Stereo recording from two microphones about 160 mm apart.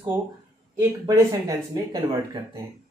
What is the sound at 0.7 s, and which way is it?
Speech, 20° right (ahead or behind).